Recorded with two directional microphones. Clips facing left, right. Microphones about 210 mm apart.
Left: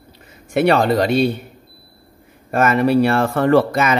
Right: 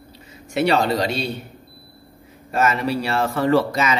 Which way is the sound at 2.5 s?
55° left (ahead or behind).